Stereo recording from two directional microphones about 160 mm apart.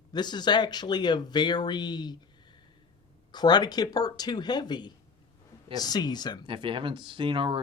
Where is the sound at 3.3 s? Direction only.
25° left (ahead or behind).